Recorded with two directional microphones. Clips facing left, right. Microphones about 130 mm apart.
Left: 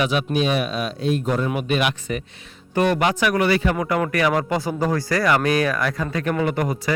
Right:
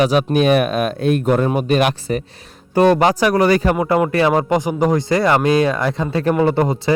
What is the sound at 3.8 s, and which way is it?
Speech, 25° right (ahead or behind).